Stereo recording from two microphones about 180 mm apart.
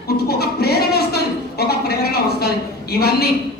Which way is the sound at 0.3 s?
60° left (ahead or behind).